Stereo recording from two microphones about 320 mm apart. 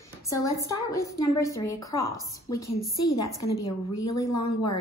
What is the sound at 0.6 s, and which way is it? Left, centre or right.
A woman's voice, centre.